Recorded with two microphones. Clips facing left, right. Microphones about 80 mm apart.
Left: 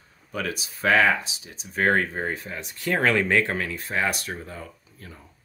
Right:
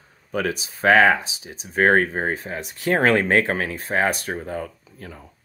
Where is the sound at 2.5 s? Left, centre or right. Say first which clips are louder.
Right 5 dB; right.